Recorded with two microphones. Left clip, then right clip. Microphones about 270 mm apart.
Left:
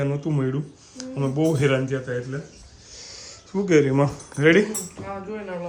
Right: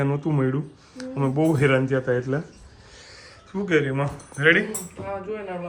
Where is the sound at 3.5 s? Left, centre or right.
Centre.